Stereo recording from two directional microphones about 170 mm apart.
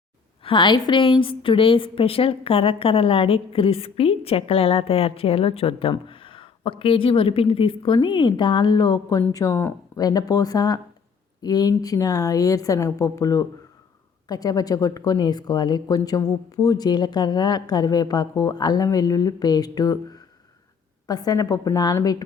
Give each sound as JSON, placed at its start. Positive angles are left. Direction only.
{"t": 0.4, "sound": "a woman's voice", "side_deg": 30}